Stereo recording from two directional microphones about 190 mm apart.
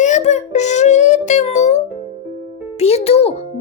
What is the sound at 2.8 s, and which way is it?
Speech, 35° left (ahead or behind).